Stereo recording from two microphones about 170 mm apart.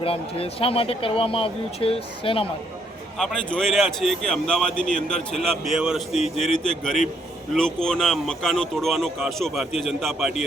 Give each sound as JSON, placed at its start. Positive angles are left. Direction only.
{"t": 0.0, "sound": "speech", "side_deg": 35}
{"t": 3.2, "sound": "speech", "side_deg": 5}